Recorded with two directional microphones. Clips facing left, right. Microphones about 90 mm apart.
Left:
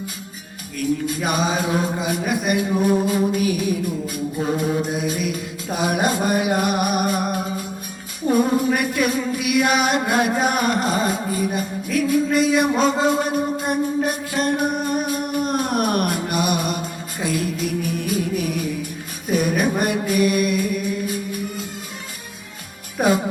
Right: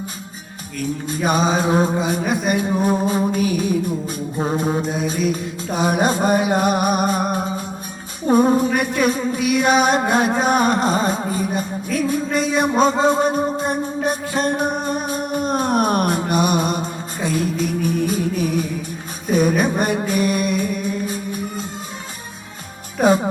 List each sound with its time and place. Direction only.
0.8 s music: 30° right (ahead or behind)
19.3 s mantra: 30° right (ahead or behind)
23.0 s music: 30° right (ahead or behind)